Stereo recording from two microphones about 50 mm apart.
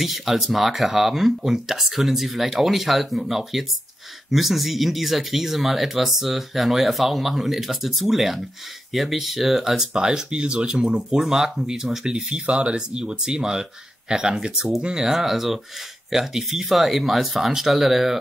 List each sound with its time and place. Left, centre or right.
0.0 s speech: centre
9.7 s speech: centre
15.0 s speech: centre